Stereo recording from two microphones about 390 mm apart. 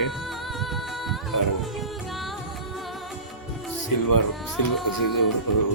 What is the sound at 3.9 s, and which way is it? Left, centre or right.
Music, left.